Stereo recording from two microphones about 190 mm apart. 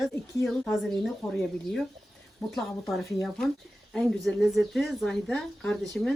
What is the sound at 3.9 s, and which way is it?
A woman's voice, centre (ahead or behind).